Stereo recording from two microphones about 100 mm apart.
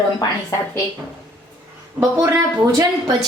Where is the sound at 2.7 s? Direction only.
40° right (ahead or behind).